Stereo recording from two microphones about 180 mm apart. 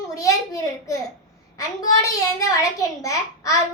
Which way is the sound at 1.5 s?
20° left (ahead or behind).